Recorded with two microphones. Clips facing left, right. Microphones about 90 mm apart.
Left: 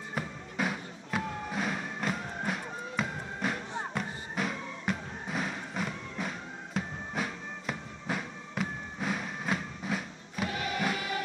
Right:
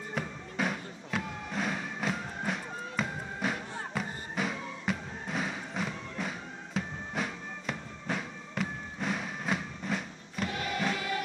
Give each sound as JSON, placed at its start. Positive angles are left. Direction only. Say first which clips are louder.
{"t": 0.1, "sound": "music", "louder": "even", "side_deg": 0}
{"t": 10.5, "sound": "music", "louder": "even", "side_deg": 20}